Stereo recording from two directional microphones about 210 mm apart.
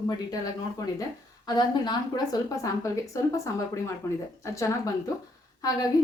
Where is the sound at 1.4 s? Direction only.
20° left (ahead or behind).